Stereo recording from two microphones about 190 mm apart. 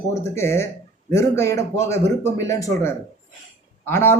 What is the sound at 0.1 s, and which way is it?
Speech, 15° left (ahead or behind).